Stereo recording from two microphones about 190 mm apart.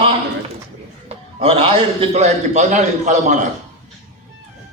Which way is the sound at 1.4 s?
30° right (ahead or behind).